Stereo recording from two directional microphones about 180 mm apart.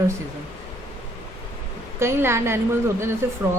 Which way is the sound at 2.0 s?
15° right (ahead or behind).